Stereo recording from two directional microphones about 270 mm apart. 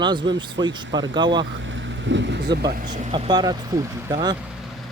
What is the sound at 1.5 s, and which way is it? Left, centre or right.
Speech, right.